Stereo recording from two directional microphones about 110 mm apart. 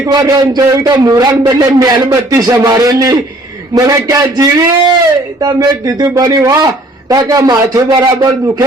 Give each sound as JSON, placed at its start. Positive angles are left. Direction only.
{"t": 0.1, "sound": "a man's voice", "side_deg": -35}